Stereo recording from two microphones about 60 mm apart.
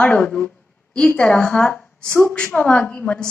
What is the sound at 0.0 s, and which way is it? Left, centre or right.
A woman's voice, left.